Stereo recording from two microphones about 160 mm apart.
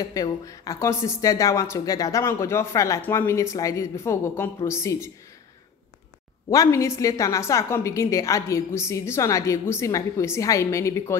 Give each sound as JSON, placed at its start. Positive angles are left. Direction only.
{"t": 0.0, "sound": "a woman's voice", "side_deg": 20}
{"t": 6.5, "sound": "speech", "side_deg": 20}